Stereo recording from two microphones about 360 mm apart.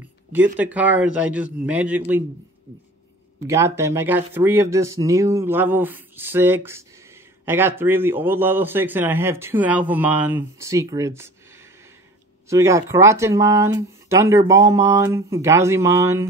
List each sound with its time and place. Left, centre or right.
0.6 s a man's voice: centre
3.3 s a man's voice: centre
12.4 s speech: centre